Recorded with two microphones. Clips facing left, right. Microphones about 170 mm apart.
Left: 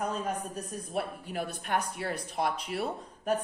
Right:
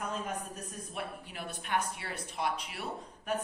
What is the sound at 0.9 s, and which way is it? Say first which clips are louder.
Speech: left 9 dB; 40° left (ahead or behind).